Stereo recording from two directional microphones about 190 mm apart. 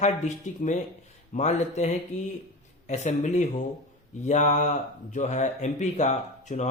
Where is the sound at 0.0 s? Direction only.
40° left (ahead or behind).